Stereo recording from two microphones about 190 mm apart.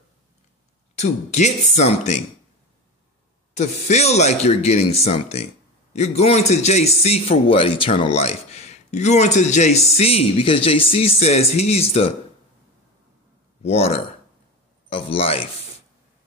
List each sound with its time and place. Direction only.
0.9 s a man's voice: 35° left (ahead or behind)
3.5 s a man's voice: 35° left (ahead or behind)
13.7 s a man's voice: 30° left (ahead or behind)